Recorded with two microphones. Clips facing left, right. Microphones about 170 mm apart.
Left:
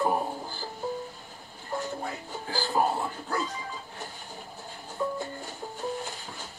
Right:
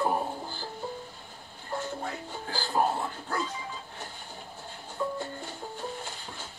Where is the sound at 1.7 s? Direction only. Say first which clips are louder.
Left 1 dB; centre (ahead or behind).